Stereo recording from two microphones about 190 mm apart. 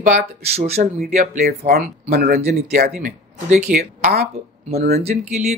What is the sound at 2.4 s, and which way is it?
Speech, 40° right (ahead or behind).